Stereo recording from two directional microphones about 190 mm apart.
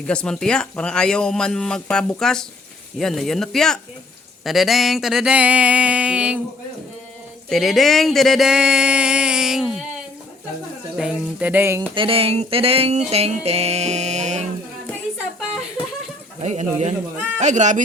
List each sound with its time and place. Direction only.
0.1 s a man's voice: 5° left (ahead or behind)
7.5 s speech: centre (ahead or behind)
10.9 s speech: 5° right (ahead or behind)
11.9 s music: 30° right (ahead or behind)
16.4 s music: 35° right (ahead or behind)